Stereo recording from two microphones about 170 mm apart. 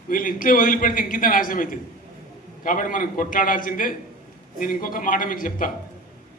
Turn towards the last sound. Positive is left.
turn(degrees=55)  # may be behind; listen again after turning